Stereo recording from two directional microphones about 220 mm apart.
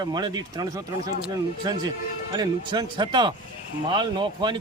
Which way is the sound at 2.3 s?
20° right (ahead or behind).